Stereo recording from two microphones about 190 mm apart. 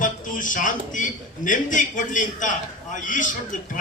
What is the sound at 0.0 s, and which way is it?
A man's voice, 45° left (ahead or behind).